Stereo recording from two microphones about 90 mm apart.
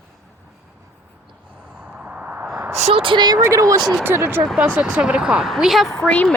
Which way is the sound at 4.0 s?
25° right (ahead or behind).